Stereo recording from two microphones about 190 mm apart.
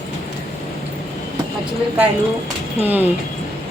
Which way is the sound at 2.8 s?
10° right (ahead or behind).